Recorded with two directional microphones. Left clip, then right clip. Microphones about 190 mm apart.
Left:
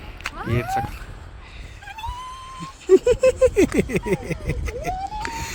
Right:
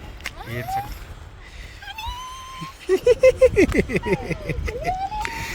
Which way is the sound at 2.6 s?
5° left (ahead or behind).